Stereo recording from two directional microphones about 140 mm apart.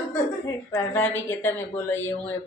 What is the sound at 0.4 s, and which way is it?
Speech, 15° left (ahead or behind).